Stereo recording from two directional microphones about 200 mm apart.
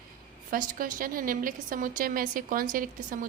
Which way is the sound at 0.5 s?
45° right (ahead or behind).